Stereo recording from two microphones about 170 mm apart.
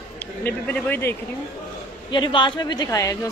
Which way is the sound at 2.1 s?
30° left (ahead or behind).